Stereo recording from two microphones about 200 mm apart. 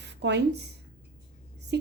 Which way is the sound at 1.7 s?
60° right (ahead or behind).